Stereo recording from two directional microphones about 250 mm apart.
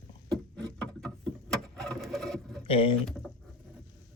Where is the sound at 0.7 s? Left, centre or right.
Centre.